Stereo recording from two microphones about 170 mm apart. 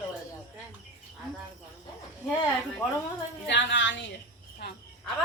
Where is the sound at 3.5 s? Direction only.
90° left.